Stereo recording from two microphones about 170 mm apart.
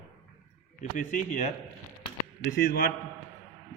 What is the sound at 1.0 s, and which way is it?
Speech, 50° left (ahead or behind).